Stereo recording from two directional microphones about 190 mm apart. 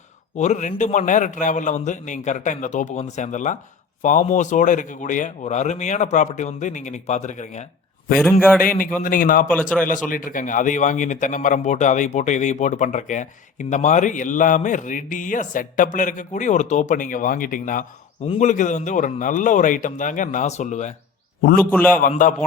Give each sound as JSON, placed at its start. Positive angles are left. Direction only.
{"t": 0.3, "sound": "a man's voice", "side_deg": 40}
{"t": 8.2, "sound": "a man's voice", "side_deg": 10}
{"t": 8.8, "sound": "a man's voice", "side_deg": 45}
{"t": 9.5, "sound": "a man's voice", "side_deg": 5}
{"t": 9.8, "sound": "a man's voice", "side_deg": 45}
{"t": 21.6, "sound": "a man's voice", "side_deg": 10}
{"t": 21.9, "sound": "a man's voice", "side_deg": 45}